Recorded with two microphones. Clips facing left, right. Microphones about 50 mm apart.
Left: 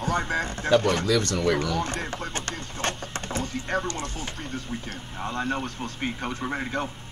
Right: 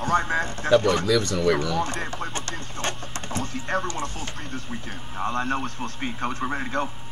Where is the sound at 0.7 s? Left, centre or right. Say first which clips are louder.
Right 2 dB; centre.